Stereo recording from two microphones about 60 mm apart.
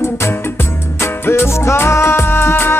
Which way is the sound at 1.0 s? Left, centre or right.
Left.